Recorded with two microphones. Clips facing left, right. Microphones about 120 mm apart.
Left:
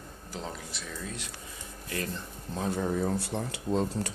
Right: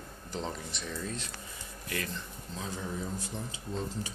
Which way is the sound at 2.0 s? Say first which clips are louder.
Left 3 dB; 55° left (ahead or behind).